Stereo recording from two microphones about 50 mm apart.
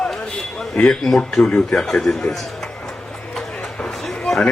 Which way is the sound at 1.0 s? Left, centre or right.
Centre.